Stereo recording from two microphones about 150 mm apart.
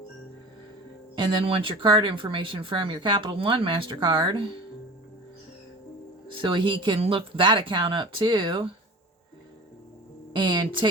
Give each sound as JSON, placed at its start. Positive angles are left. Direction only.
{"t": 1.1, "sound": "speech", "side_deg": -35}
{"t": 6.3, "sound": "speech", "side_deg": -35}
{"t": 10.3, "sound": "speech", "side_deg": -30}